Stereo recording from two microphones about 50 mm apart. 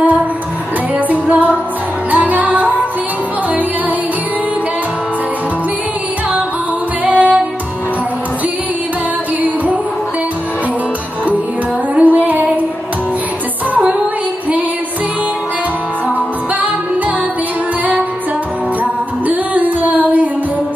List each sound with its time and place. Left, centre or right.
0.9 s music: right
7.1 s music: right
11.9 s music: right
19.2 s music: right